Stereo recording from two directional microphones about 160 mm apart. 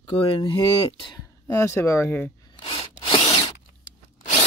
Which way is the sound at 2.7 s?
25° left (ahead or behind).